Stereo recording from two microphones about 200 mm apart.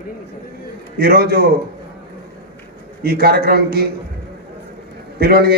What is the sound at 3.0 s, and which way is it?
Speech, 50° right (ahead or behind).